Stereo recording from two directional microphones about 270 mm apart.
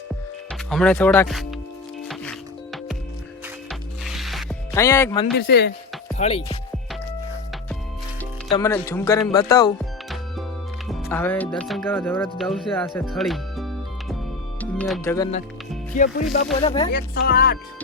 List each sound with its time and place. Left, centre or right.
0.7 s speech: centre
3.7 s music: centre
4.7 s speech: centre
5.4 s speech: left
6.1 s speech: left
8.5 s speech: centre
10.8 s speech: centre
14.6 s music: centre
16.0 s speech: left
16.6 s speech: centre
16.9 s speech: left